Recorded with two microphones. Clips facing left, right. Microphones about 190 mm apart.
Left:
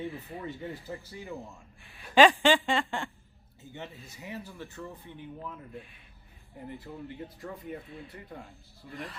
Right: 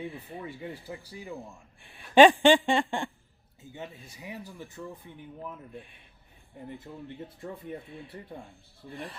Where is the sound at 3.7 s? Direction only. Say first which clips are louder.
Right 1 dB; 15° right (ahead or behind).